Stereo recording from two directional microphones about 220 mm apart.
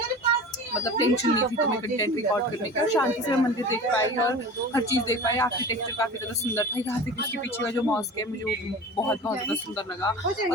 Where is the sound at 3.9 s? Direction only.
15° left (ahead or behind).